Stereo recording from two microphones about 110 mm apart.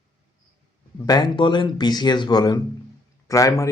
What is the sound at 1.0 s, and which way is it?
A man's voice, 40° left (ahead or behind).